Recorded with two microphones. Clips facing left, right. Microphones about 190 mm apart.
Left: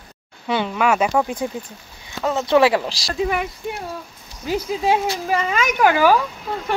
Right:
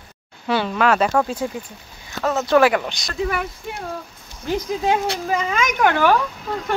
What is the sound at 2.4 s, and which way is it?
Speech, 25° left (ahead or behind).